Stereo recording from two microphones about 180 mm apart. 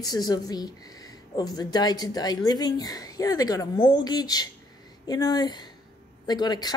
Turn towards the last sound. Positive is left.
turn(degrees=20)  # may be behind; listen again after turning